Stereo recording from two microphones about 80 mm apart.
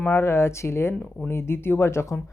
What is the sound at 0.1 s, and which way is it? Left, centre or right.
Speech, left.